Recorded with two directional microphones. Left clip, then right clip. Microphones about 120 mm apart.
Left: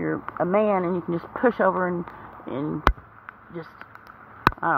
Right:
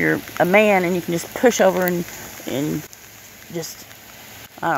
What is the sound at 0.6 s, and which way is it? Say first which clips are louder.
Speech: right 6 dB; 15° right (ahead or behind).